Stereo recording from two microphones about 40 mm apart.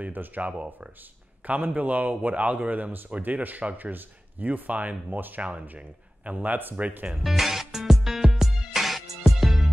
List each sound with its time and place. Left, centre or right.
0.0 s speech: right
0.4 s speech: right
7.2 s music: centre